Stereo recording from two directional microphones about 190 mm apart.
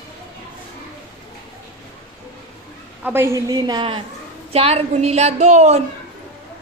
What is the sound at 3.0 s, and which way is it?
A woman's voice, 10° right (ahead or behind).